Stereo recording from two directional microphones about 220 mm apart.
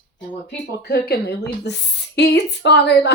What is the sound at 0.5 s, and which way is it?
Speech, 45° left (ahead or behind).